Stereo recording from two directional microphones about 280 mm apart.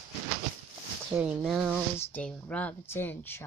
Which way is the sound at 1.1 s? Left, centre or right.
Centre.